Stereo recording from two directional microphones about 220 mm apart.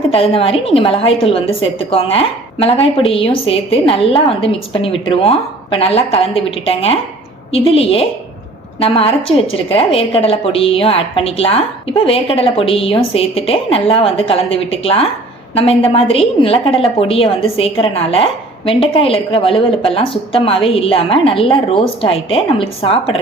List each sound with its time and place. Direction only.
0.1 s a woman's voice: 25° left (ahead or behind)